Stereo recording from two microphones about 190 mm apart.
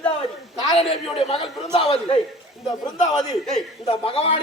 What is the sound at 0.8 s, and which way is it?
A man's voice, 30° left (ahead or behind).